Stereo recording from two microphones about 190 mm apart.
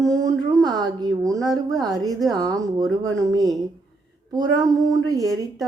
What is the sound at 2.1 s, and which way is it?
Speech, centre (ahead or behind).